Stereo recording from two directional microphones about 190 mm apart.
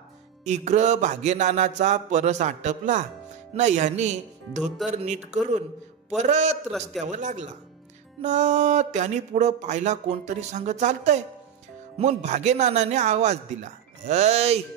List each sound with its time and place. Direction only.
0.5 s speech: 35° right (ahead or behind)
6.7 s a man's voice: centre (ahead or behind)
7.1 s speech: 40° right (ahead or behind)